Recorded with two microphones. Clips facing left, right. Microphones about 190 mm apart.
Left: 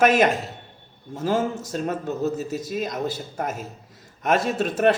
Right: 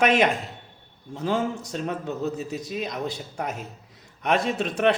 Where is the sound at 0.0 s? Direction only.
5° left (ahead or behind).